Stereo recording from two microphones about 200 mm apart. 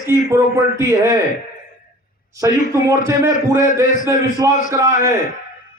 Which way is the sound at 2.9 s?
15° right (ahead or behind).